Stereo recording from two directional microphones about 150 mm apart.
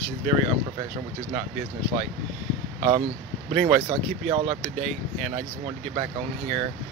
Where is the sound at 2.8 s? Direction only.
40° right (ahead or behind).